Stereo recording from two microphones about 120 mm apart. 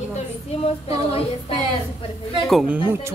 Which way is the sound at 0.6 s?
55° left (ahead or behind).